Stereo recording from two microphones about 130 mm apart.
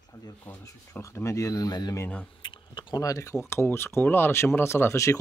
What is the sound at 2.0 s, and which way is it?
Speech, 10° left (ahead or behind).